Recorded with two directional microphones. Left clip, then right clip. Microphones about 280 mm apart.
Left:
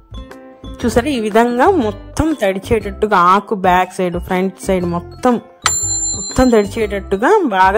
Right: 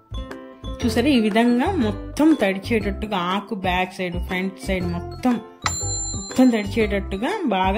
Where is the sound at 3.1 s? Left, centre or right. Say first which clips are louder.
Left 17 dB; left.